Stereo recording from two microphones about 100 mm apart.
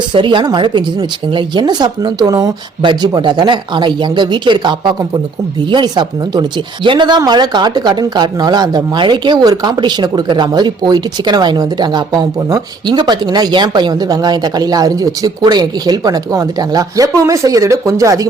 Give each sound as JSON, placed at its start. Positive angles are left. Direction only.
{"t": 0.1, "sound": "speech", "side_deg": -55}